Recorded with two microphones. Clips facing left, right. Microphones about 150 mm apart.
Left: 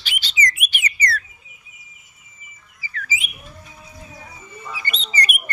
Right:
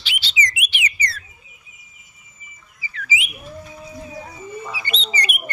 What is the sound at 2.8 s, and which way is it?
Bird, 45° left (ahead or behind).